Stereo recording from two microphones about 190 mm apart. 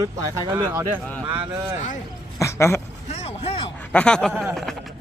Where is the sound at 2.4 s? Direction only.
15° left (ahead or behind).